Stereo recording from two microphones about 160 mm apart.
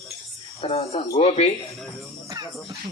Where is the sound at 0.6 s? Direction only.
40° left (ahead or behind).